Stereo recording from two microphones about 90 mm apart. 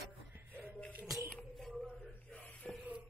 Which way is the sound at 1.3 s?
5° left (ahead or behind).